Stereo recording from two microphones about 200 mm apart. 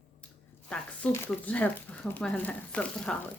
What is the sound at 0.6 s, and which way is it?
Speech, 5° left (ahead or behind).